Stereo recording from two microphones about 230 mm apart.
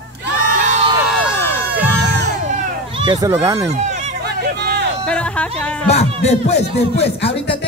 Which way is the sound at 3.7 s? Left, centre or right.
Right.